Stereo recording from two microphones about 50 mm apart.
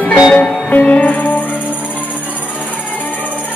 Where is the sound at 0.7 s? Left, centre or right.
Left.